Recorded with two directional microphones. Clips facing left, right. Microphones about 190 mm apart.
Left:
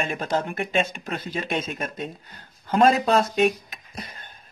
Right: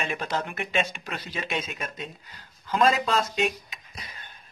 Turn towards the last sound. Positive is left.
turn(degrees=50)  # may be behind; listen again after turning